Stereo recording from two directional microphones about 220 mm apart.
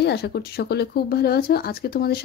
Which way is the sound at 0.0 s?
45° left (ahead or behind).